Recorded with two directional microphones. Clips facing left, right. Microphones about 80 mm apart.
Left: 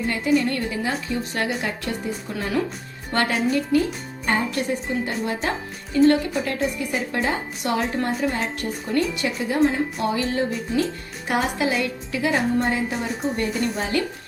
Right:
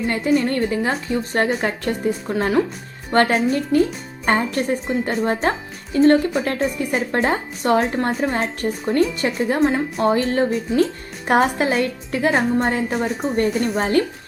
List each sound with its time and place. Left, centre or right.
0.1 s a woman's voice: right